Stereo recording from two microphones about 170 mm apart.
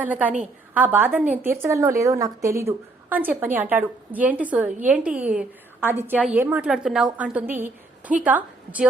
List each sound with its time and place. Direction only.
0.0 s a woman's voice: 10° right (ahead or behind)